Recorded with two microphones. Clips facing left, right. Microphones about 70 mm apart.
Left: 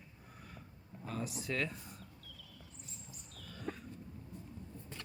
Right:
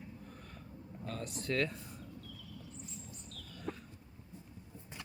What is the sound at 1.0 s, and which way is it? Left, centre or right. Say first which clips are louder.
Speech: right 1 dB; centre.